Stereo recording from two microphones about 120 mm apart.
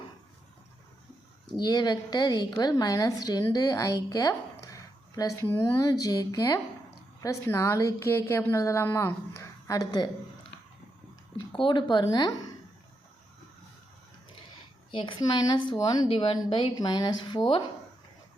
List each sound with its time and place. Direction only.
1.5 s a woman's voice: 35° left (ahead or behind)
11.5 s a woman's voice: 45° left (ahead or behind)
14.8 s a woman's voice: 45° left (ahead or behind)
16.0 s a woman's voice: 45° left (ahead or behind)